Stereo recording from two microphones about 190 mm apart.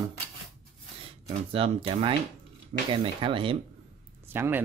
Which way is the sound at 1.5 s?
30° right (ahead or behind).